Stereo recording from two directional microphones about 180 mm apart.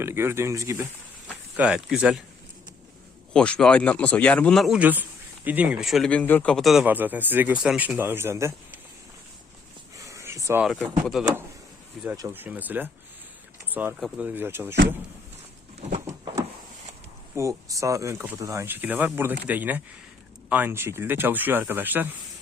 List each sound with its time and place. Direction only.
0.0 s speech: 15° right (ahead or behind)
1.3 s speech: 5° right (ahead or behind)
3.3 s speech: 5° left (ahead or behind); by 8.8 s 15° right (ahead or behind)
10.1 s a sound: 15° right (ahead or behind)
10.8 s speech: centre (ahead or behind)
12.1 s speech: 15° right (ahead or behind)
13.7 s a sound: 10° right (ahead or behind)
14.0 s speech: 5° right (ahead or behind)
17.3 s speech: 15° right (ahead or behind)